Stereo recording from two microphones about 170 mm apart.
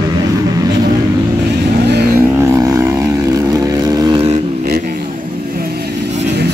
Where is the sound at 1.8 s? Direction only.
75° right (ahead or behind).